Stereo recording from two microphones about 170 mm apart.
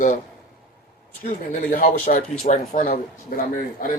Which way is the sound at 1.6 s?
55° left (ahead or behind).